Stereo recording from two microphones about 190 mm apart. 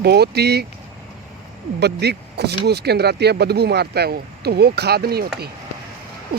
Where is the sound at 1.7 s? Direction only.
60° right (ahead or behind).